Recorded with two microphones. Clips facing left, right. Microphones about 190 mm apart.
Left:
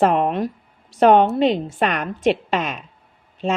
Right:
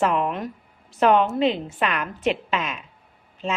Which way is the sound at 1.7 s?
40° left (ahead or behind).